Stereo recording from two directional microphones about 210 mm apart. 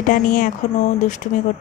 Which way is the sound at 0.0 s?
40° left (ahead or behind).